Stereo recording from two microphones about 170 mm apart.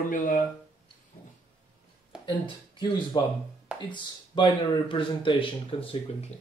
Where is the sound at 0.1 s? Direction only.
50° left (ahead or behind).